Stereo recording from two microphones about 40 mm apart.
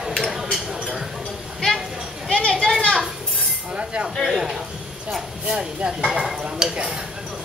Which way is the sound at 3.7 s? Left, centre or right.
Right.